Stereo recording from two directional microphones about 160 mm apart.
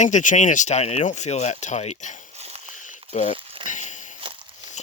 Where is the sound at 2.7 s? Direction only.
50° left (ahead or behind).